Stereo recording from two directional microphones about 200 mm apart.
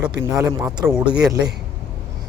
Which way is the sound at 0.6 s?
5° right (ahead or behind).